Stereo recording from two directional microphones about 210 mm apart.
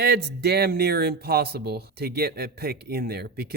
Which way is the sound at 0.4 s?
50° right (ahead or behind).